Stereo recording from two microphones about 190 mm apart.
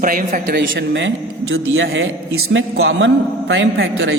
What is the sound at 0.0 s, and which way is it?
Speech, 45° right (ahead or behind).